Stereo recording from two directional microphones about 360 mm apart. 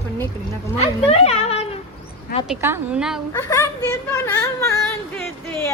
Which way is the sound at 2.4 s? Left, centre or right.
Centre.